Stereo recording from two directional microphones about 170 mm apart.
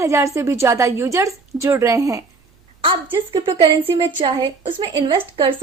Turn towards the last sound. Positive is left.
turn(degrees=-25)  # may be behind; listen again after turning